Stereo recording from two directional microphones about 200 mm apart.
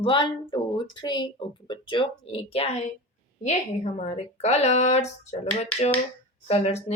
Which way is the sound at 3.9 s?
35° left (ahead or behind).